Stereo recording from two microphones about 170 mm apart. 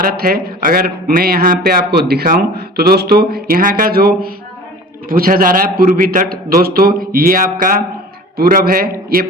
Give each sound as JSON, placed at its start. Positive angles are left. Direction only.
{"t": 0.0, "sound": "a man's voice", "side_deg": -60}
{"t": 3.5, "sound": "a man's voice", "side_deg": -55}